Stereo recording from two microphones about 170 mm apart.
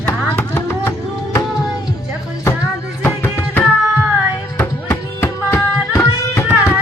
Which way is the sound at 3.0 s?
15° left (ahead or behind).